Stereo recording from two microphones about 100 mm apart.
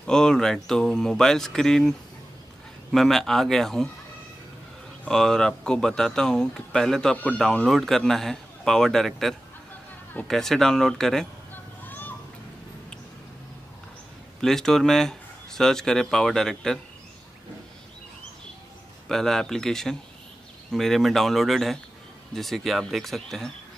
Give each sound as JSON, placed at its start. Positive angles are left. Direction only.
{"t": 0.0, "sound": "speech", "side_deg": 5}
{"t": 5.0, "sound": "speech", "side_deg": 5}
{"t": 11.8, "sound": "a sound", "side_deg": 20}
{"t": 14.4, "sound": "speech", "side_deg": 5}
{"t": 19.0, "sound": "speech", "side_deg": 5}